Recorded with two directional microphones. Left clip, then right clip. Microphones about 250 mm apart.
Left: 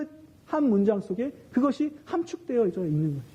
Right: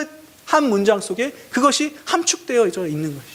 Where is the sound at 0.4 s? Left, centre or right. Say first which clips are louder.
Right 9 dB; centre.